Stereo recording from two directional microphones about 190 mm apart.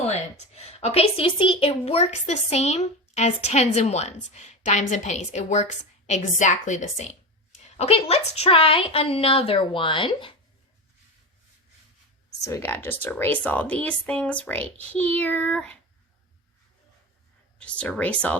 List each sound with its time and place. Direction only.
0.1 s a woman's voice: 35° left (ahead or behind)
12.4 s speech: 15° left (ahead or behind)
17.6 s speech: 5° left (ahead or behind)